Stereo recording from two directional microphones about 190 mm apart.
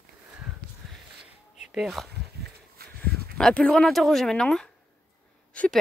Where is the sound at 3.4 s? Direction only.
5° left (ahead or behind).